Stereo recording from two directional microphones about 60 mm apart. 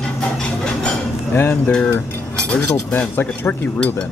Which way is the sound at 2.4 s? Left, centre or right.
Left.